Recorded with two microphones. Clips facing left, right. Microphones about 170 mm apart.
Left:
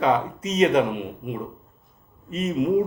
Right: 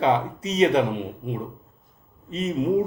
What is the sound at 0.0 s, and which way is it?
Speech, 30° right (ahead or behind).